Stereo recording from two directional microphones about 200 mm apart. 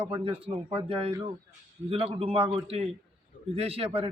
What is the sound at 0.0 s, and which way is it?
A man's voice, 30° right (ahead or behind).